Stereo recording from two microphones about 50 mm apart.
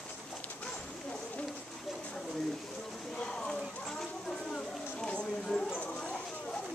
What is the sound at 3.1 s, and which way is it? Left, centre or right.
Clip-clop, centre.